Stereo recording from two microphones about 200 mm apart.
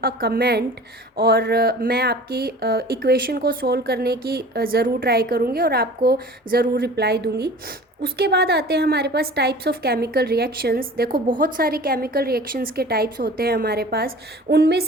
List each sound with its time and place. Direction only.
0.0 s a woman's voice: 50° right (ahead or behind)